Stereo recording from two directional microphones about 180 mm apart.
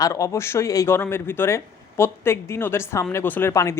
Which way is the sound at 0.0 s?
20° left (ahead or behind).